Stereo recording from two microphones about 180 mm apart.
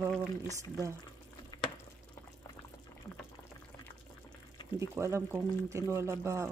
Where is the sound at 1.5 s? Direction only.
20° left (ahead or behind).